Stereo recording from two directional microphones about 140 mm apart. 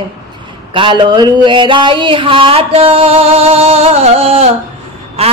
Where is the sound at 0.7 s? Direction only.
35° right (ahead or behind).